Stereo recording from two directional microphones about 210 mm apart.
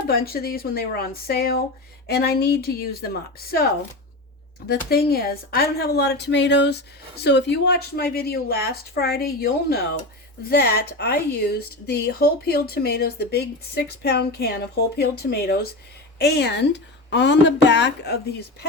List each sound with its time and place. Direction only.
0.1 s a woman's voice: 45° left (ahead or behind)
4.9 s a woman's voice: 50° left (ahead or behind)